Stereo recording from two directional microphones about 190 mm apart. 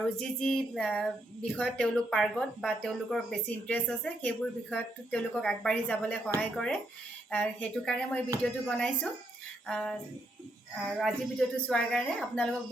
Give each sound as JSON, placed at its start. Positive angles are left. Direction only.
{"t": 0.0, "sound": "a woman's voice", "side_deg": 5}